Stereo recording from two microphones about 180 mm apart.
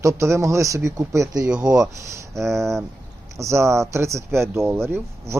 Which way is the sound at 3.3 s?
15° right (ahead or behind).